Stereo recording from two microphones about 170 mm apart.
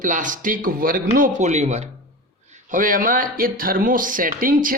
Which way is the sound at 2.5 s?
50° right (ahead or behind).